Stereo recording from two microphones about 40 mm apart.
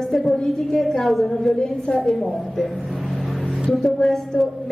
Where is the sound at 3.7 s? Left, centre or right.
Centre.